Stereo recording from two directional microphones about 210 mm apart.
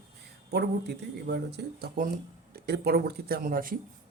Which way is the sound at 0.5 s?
50° right (ahead or behind).